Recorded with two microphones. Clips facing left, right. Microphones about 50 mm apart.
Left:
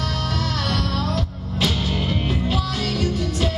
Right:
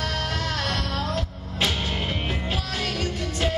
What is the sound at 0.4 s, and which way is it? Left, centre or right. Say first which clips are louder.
Music: left 3 dB; right.